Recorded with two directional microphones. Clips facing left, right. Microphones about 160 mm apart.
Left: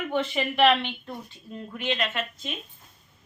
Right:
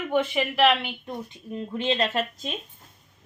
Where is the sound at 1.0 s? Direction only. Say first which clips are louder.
Right 4 dB; 20° right (ahead or behind); by 2.5 s 35° right (ahead or behind).